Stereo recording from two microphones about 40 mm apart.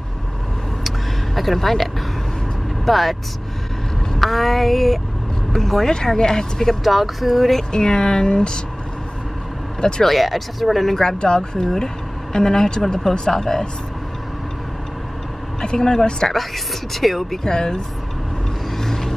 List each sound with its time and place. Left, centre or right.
0.8 s vehicle: centre
2.8 s speech: centre
4.2 s speech: centre
6.7 s speech: centre
7.7 s speech: centre
9.8 s speech: centre
10.0 s speech: centre
11.0 s speech: centre
15.6 s speech: centre
16.3 s speech: centre
17.4 s speech: centre
18.8 s vehicle: centre